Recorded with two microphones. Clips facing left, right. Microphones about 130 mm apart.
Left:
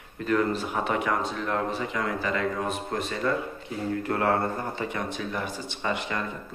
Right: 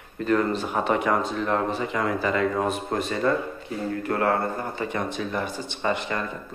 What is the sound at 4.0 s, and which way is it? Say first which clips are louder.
Speech: right 2 dB; 20° left (ahead or behind).